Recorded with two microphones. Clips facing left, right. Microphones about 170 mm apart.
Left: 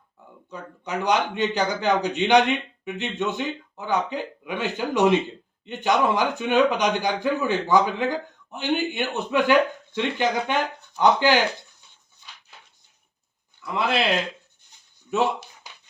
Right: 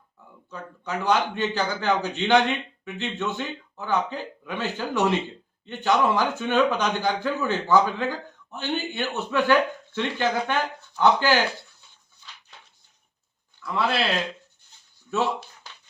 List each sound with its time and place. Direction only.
0.5 s a man's voice: 15° left (ahead or behind)
13.6 s a man's voice: 15° left (ahead or behind)
14.7 s a sound: 15° left (ahead or behind)
15.1 s a man's voice: 15° left (ahead or behind)